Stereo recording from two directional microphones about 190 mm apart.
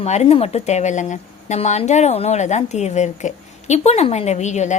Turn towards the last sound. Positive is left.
turn(degrees=40)  # may be behind; listen again after turning